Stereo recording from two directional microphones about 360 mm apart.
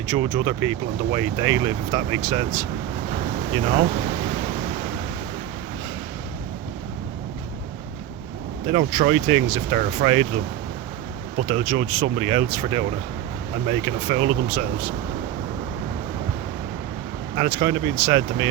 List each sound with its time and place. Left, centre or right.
0.1 s speech: centre
3.1 s a sound: centre
8.6 s speech: centre
11.4 s speech: centre
17.3 s speech: centre